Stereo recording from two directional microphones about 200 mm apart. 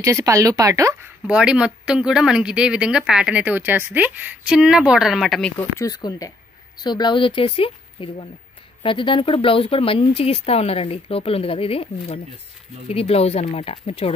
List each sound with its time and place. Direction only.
0.0 s speech: 15° right (ahead or behind)
1.3 s speech: 5° right (ahead or behind)
5.6 s speech: 15° left (ahead or behind); by 14.1 s 30° left (ahead or behind)